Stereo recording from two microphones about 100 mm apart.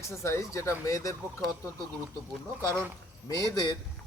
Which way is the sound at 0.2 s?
30° left (ahead or behind).